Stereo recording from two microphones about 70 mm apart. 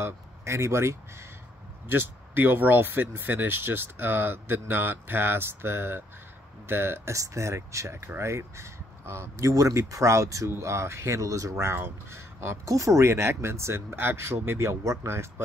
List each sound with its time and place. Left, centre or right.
0.0 s speech: right
1.9 s speech: right
7.2 s speech: right